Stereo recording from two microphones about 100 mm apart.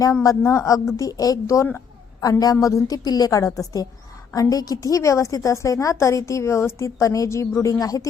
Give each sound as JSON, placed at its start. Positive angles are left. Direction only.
{"t": 0.0, "sound": "a woman's voice", "side_deg": 35}